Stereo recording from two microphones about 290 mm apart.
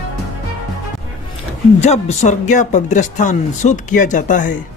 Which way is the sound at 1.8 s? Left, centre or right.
Left.